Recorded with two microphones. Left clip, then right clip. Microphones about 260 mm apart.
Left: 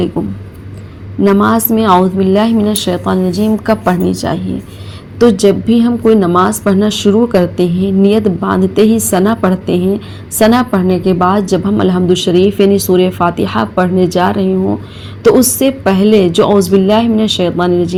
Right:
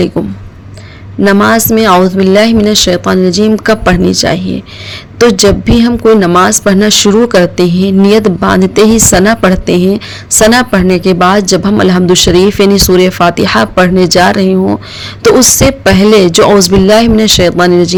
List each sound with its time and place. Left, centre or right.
1.2 s speech: right